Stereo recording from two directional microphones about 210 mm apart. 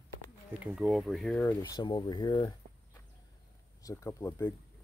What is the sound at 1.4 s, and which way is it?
Speech, 15° left (ahead or behind).